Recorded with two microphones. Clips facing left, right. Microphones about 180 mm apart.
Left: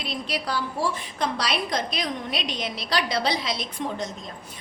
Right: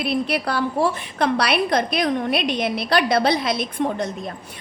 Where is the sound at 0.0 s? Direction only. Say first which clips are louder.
Right 8 dB; 60° right (ahead or behind).